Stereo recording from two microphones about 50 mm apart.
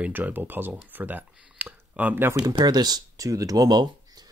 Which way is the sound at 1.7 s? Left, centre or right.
Right.